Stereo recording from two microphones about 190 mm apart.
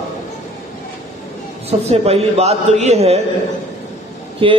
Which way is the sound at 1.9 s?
30° right (ahead or behind).